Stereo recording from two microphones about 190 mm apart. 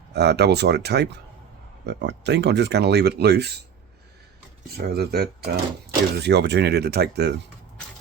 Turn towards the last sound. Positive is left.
turn(degrees=-60)  # may be behind; listen again after turning